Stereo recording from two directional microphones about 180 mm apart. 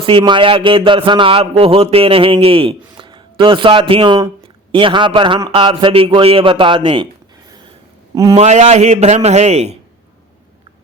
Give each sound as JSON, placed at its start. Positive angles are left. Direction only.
{"t": 0.0, "sound": "a man's voice", "side_deg": -30}
{"t": 8.1, "sound": "a man's voice", "side_deg": -20}
{"t": 8.4, "sound": "a man's voice", "side_deg": -40}